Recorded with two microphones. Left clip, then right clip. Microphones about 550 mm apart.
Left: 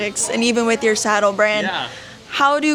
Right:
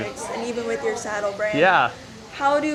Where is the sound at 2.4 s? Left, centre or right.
Left.